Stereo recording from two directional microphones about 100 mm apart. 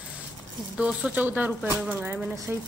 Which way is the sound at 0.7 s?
10° right (ahead or behind).